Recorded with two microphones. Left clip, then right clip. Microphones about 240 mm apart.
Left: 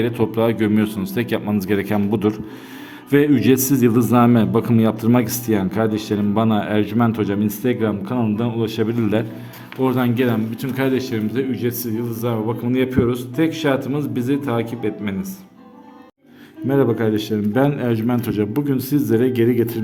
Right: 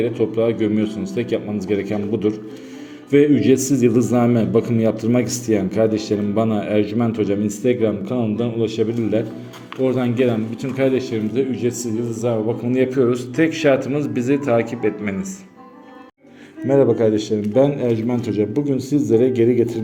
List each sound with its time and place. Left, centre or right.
0.0 s a man's voice: left
16.6 s a man's voice: centre